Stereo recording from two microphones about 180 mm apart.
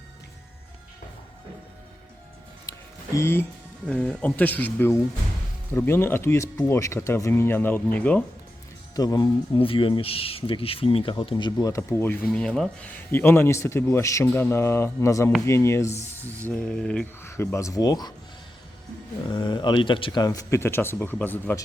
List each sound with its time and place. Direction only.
2.7 s a sound: 20° left (ahead or behind)
3.2 s speech: 15° left (ahead or behind)
9.0 s speech: 20° left (ahead or behind)
19.3 s speech: 25° left (ahead or behind)